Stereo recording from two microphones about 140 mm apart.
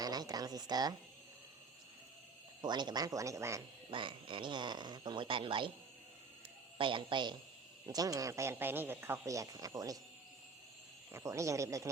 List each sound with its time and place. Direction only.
0.0 s speech: 25° right (ahead or behind)
2.6 s a man's voice: 30° right (ahead or behind)
3.9 s speech: 35° right (ahead or behind)
6.7 s a man's voice: 35° right (ahead or behind)
11.1 s a man's voice: 20° right (ahead or behind)